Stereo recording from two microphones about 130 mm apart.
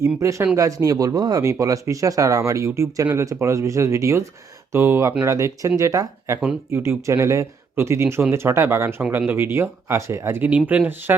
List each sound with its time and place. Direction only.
0.0 s speech: 20° right (ahead or behind)